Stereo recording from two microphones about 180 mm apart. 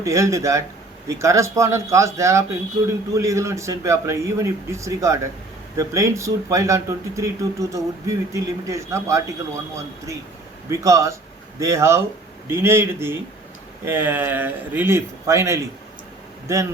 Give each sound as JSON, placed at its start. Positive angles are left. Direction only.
{"t": 0.0, "sound": "a man's voice", "side_deg": -15}
{"t": 10.7, "sound": "a man's voice", "side_deg": -15}